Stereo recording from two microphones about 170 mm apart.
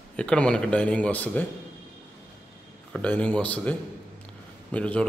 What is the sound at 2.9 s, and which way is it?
Speech, 5° left (ahead or behind).